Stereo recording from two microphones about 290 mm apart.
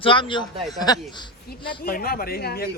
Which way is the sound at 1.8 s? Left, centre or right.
Left.